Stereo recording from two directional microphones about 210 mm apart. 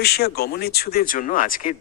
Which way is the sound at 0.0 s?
50° left (ahead or behind).